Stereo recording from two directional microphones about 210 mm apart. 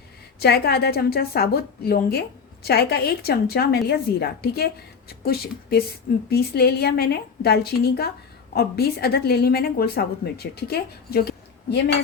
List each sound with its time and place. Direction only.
0.3 s a woman's voice: 50° left (ahead or behind)